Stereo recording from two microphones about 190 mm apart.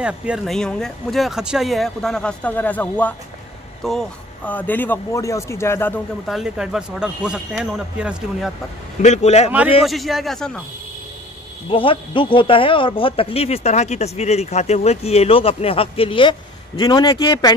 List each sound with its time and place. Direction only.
0.0 s speech: 5° right (ahead or behind); by 5.9 s 10° left (ahead or behind)
6.2 s speech: centre (ahead or behind)
9.0 s speech: 35° left (ahead or behind)
9.8 s speech: centre (ahead or behind)
11.7 s speech: 25° left (ahead or behind)